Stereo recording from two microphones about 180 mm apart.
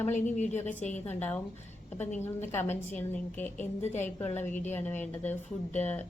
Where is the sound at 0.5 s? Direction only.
10° left (ahead or behind).